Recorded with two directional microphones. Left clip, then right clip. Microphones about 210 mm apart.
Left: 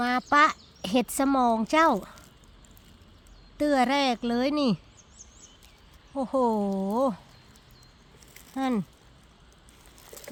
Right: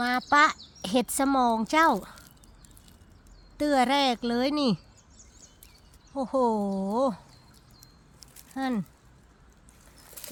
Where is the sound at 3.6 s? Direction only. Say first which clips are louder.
Even; centre (ahead or behind).